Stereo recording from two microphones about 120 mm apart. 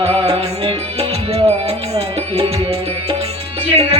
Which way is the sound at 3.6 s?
55° right (ahead or behind).